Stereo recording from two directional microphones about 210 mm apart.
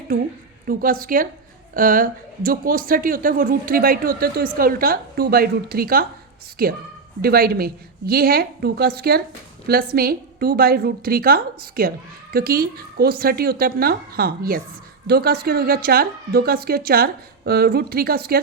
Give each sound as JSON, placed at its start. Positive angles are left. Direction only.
{"t": 0.7, "sound": "a woman's voice", "side_deg": -45}